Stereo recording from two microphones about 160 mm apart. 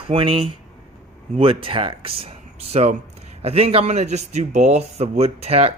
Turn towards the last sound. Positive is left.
turn(degrees=-40)  # may be behind; listen again after turning